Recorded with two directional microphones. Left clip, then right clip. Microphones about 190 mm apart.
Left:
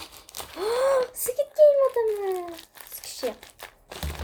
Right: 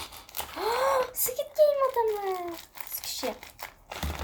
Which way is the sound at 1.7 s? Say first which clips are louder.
Left 4 dB; 5° left (ahead or behind).